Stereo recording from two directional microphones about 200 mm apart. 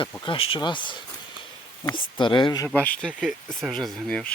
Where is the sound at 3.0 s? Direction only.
Centre (ahead or behind).